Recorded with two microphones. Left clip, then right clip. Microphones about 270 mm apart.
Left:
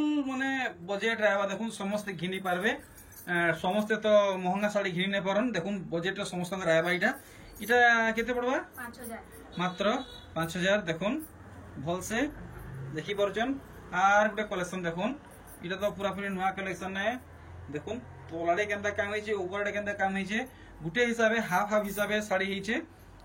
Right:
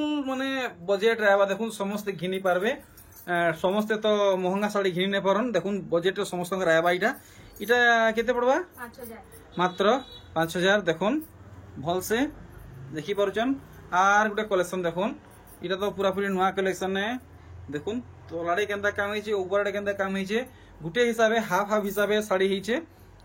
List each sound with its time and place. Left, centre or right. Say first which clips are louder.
0.3 s speech: right 2 dB; centre
18.5 s speech: right 3 dB; centre